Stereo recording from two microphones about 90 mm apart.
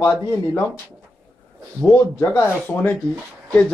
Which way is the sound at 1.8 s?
25° left (ahead or behind).